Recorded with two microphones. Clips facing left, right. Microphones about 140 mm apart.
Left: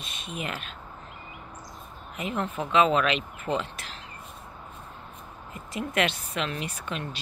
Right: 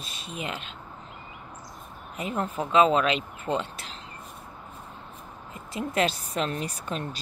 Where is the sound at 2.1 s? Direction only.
35° right (ahead or behind).